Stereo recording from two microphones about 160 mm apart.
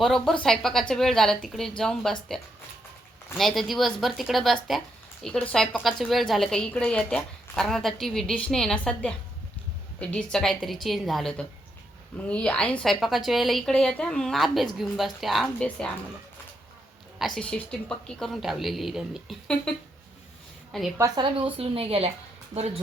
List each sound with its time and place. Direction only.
0.0 s a woman's voice: centre (ahead or behind)
17.2 s a woman's voice: centre (ahead or behind)
20.7 s a woman's voice: centre (ahead or behind)
21.3 s a woman's voice: 35° right (ahead or behind)